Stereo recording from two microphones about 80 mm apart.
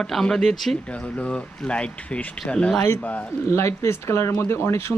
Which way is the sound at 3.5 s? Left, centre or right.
Left.